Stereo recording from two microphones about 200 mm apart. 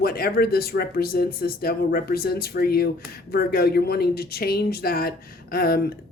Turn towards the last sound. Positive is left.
turn(degrees=50)  # may be behind; listen again after turning